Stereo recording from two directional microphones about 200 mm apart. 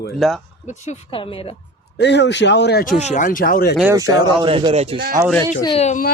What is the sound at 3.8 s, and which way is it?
Speech, 15° right (ahead or behind).